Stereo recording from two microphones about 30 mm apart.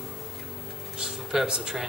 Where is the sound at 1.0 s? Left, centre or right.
Right.